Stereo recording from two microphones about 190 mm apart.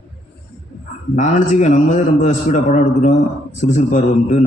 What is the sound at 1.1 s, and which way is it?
Speech, 40° left (ahead or behind).